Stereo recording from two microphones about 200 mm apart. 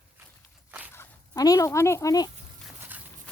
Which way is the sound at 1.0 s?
20° left (ahead or behind).